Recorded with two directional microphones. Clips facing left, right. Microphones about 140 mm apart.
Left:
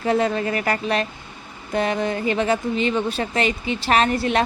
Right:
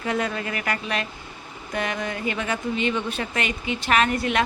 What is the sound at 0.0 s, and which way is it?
A woman's voice, 30° left (ahead or behind).